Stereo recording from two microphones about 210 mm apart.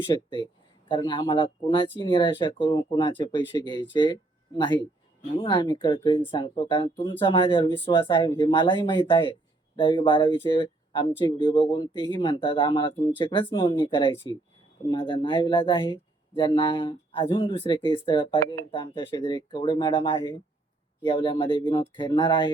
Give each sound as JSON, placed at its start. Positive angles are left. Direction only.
{"t": 0.1, "sound": "speech", "side_deg": 20}